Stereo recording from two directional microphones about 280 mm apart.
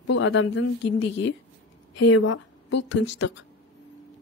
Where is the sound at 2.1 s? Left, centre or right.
Left.